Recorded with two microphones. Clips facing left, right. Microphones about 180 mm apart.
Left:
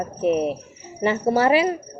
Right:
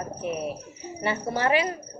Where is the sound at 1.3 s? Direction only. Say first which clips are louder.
Left 7 dB; 35° left (ahead or behind).